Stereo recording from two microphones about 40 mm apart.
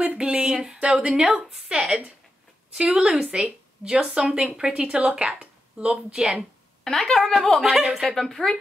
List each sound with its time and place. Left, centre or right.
0.0 s speech: right
3.0 s speech: right
4.6 s speech: centre
4.8 s speech: right
6.8 s a woman's voice: centre
7.6 s speech: centre
8.1 s a woman's voice: centre